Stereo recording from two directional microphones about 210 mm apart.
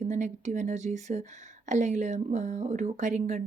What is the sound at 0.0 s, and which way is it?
Speech, 35° right (ahead or behind).